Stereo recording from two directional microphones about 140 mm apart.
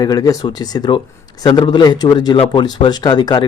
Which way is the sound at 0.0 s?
25° left (ahead or behind).